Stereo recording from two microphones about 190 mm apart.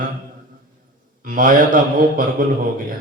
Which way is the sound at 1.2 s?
45° right (ahead or behind).